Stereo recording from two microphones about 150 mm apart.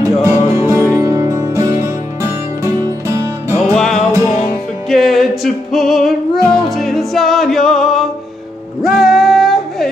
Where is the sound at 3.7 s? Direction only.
Centre (ahead or behind).